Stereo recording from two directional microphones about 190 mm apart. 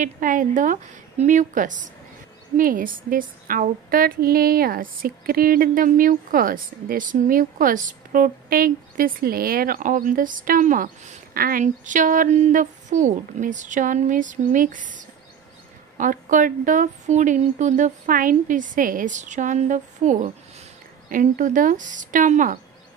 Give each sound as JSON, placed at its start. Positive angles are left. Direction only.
{"t": 0.0, "sound": "a woman's voice", "side_deg": -45}